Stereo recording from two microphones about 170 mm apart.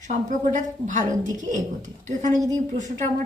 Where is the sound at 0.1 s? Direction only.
45° right (ahead or behind).